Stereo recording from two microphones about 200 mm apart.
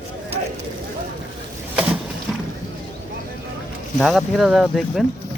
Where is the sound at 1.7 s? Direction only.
5° right (ahead or behind).